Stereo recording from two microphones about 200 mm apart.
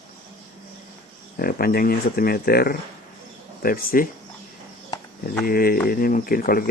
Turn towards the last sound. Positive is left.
turn(degrees=45)  # may be behind; listen again after turning